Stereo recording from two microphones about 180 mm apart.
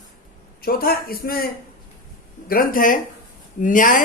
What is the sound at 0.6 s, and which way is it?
A man's voice, 55° left (ahead or behind).